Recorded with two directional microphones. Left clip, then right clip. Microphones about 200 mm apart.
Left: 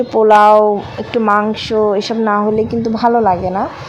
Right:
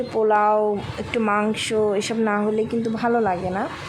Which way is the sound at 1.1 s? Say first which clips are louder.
Left 8 dB; 10° left (ahead or behind).